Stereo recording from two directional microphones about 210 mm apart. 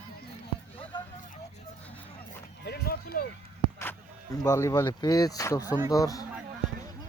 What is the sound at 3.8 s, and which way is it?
Speech, 15° left (ahead or behind).